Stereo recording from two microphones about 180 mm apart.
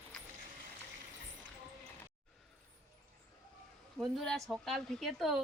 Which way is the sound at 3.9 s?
Centre (ahead or behind).